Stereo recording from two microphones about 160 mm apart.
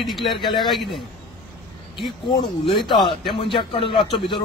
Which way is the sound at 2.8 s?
30° left (ahead or behind).